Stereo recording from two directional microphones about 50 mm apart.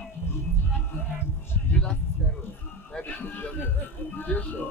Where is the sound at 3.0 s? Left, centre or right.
Left.